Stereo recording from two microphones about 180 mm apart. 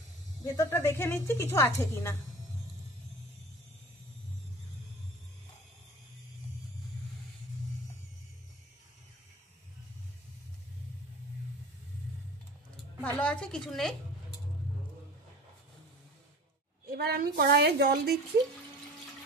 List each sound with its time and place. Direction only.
0.4 s a woman's voice: 15° left (ahead or behind)
13.0 s a woman's voice: 5° left (ahead or behind)
16.8 s a woman's voice: 60° right (ahead or behind)